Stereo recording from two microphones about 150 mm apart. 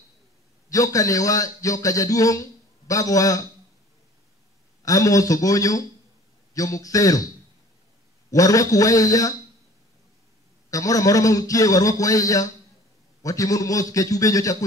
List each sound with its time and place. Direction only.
0.7 s a man's voice: 20° left (ahead or behind)
4.8 s a man's voice: 20° left (ahead or behind)
8.3 s a man's voice: 25° left (ahead or behind)
10.7 s a man's voice: 20° left (ahead or behind)